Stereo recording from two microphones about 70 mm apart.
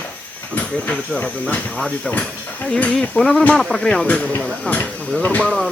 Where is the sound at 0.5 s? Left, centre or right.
Left.